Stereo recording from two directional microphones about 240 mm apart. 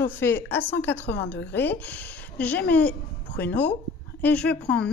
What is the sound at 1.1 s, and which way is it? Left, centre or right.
Speech, left.